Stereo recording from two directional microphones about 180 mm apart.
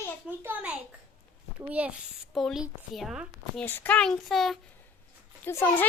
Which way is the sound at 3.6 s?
10° left (ahead or behind).